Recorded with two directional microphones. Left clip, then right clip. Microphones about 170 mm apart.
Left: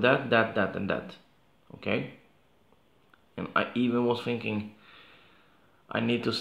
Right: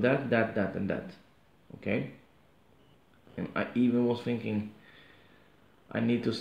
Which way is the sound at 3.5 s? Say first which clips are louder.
Left 3 dB; 10° right (ahead or behind).